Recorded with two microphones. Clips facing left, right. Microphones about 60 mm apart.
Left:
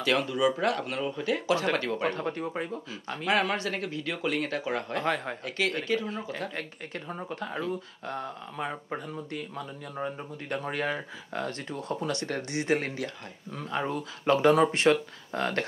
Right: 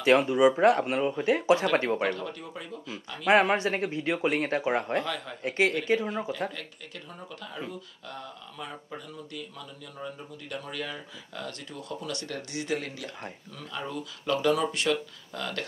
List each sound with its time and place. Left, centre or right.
0.0 s speech: right
2.0 s speech: left
3.3 s speech: right
5.0 s speech: left
5.9 s speech: right
7.1 s speech: left